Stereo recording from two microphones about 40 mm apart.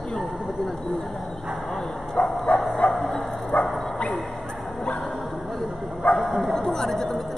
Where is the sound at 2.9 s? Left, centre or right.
Centre.